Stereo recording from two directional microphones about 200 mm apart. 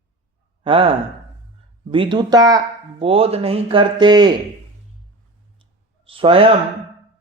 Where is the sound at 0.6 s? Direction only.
25° right (ahead or behind).